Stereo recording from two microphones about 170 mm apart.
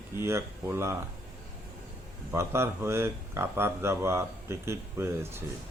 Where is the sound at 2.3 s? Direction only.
15° right (ahead or behind).